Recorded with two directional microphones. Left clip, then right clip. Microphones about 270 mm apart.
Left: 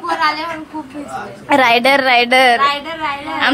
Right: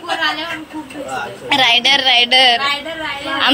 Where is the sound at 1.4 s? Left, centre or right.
Centre.